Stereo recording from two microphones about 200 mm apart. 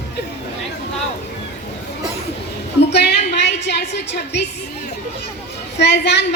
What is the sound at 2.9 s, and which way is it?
Music, 60° left (ahead or behind).